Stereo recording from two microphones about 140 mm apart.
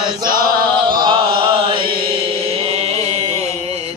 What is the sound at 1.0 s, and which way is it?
Chant, 35° right (ahead or behind).